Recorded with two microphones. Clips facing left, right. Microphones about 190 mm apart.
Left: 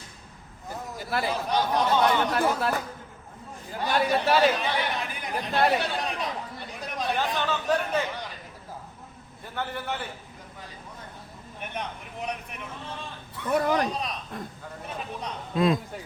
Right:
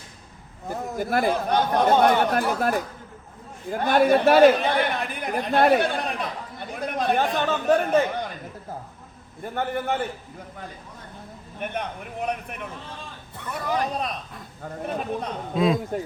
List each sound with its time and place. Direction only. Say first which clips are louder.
0.7 s speech: right 6 dB; 50° right (ahead or behind)
9.4 s speech: right 6 dB; 50° right (ahead or behind)
11.6 s speech: right 5 dB; 55° right (ahead or behind)
13.5 s speech: left 3 dB; 50° left (ahead or behind)
14.6 s speech: right 7 dB; 50° right (ahead or behind)
15.5 s speech: right 2 dB; centre (ahead or behind)